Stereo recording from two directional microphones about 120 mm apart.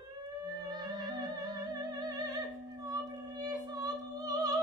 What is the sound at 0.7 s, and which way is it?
Music, 35° right (ahead or behind).